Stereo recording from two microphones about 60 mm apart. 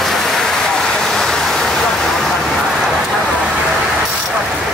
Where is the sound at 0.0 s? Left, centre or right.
Centre.